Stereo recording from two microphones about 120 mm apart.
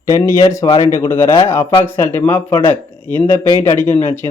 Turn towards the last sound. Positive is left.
turn(degrees=20)  # may be behind; listen again after turning